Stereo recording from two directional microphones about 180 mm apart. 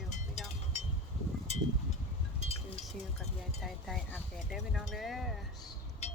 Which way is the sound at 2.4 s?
35° left (ahead or behind).